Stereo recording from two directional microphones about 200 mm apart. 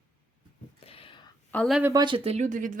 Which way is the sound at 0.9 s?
25° left (ahead or behind).